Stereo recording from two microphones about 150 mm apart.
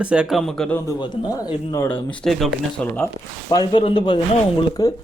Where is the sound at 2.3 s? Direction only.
Centre (ahead or behind).